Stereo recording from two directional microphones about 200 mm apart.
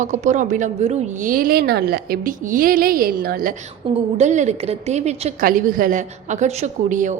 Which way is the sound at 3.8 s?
25° right (ahead or behind).